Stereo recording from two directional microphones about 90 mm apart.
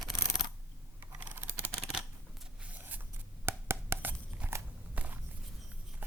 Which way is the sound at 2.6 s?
20° right (ahead or behind).